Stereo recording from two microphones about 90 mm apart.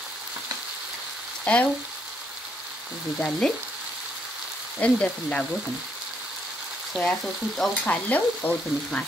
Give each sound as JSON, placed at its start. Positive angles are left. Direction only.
{"t": 1.4, "sound": "frying", "side_deg": 15}
{"t": 3.2, "sound": "frying", "side_deg": 10}
{"t": 4.8, "sound": "frying", "side_deg": 15}
{"t": 7.0, "sound": "frying", "side_deg": 5}
{"t": 7.8, "sound": "frying", "side_deg": 15}